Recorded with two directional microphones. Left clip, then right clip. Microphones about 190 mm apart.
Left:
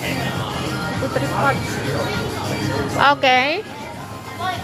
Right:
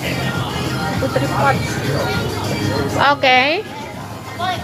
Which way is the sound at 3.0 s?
25° left (ahead or behind).